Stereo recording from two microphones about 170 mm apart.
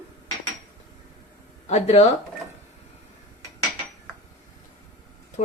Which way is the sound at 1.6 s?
40° left (ahead or behind).